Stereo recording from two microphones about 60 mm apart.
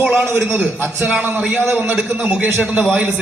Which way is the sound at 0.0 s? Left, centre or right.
Centre.